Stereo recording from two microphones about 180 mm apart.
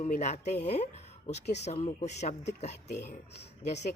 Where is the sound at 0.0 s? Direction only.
45° left (ahead or behind).